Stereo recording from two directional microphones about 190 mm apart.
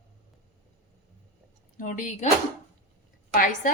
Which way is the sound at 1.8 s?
40° left (ahead or behind).